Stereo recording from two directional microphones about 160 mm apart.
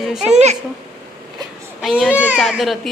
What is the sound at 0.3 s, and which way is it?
Speech, 45° right (ahead or behind).